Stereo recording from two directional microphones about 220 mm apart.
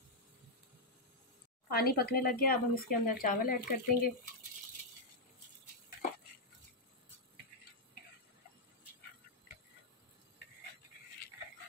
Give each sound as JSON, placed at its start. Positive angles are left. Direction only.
{"t": 1.7, "sound": "speech", "side_deg": 45}